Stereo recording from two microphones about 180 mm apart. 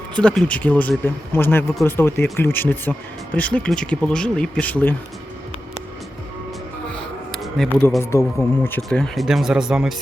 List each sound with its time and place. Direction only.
0.2 s speech: 5° left (ahead or behind)
7.3 s a sound: centre (ahead or behind)
8.1 s speech: 10° left (ahead or behind); by 9.9 s 5° right (ahead or behind)